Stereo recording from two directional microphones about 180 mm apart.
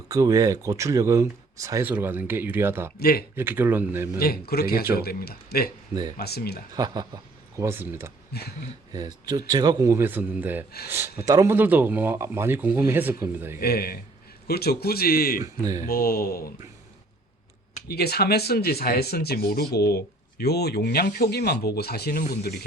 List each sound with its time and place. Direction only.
0.1 s speech: 20° right (ahead or behind)
3.0 s speech: 60° left (ahead or behind)
3.3 s speech: 10° right (ahead or behind)
4.2 s speech: 60° left (ahead or behind)
5.9 s speech: 20° right (ahead or behind)
6.1 s speech: 60° left (ahead or behind)
6.7 s speech: 25° right (ahead or behind)
8.3 s speech: 60° left (ahead or behind)
8.9 s speech: 20° right (ahead or behind)
13.6 s speech: 60° left (ahead or behind)
15.6 s speech: 20° right (ahead or behind)
15.9 s speech: 55° left (ahead or behind)
17.8 s speech: 60° left (ahead or behind)